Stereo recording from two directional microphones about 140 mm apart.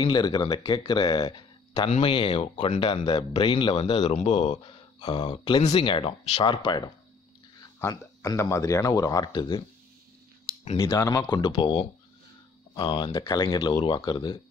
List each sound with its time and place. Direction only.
0.0 s speech: 30° left (ahead or behind)
1.9 s speech: 45° left (ahead or behind)
3.8 s a man's voice: 50° left (ahead or behind)
5.0 s speech: 35° left (ahead or behind)
5.6 s a man's voice: 55° left (ahead or behind)
5.9 s speech: 35° left (ahead or behind)
7.9 s speech: 25° left (ahead or behind)
10.8 s speech: 25° left (ahead or behind)